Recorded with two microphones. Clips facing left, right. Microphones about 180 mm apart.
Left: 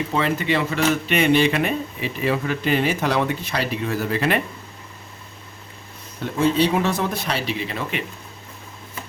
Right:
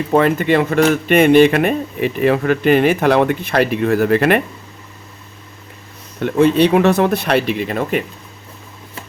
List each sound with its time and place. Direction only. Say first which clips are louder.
0.1 s speech: right 10 dB; 50° right (ahead or behind)
6.2 s speech: right 7 dB; 65° right (ahead or behind); by 8.0 s 50° right (ahead or behind)